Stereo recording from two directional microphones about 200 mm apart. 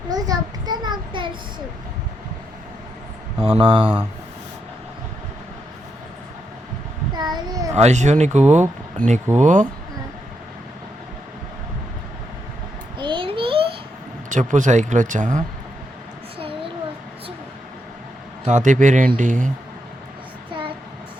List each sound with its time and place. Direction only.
0.1 s child singing: 20° right (ahead or behind)
3.4 s speech: 25° right (ahead or behind)
7.2 s child singing: 20° right (ahead or behind)
7.8 s speech: 35° right (ahead or behind)
13.0 s a sound: 25° right (ahead or behind)
14.3 s speech: 40° right (ahead or behind)
18.4 s speech: 40° right (ahead or behind)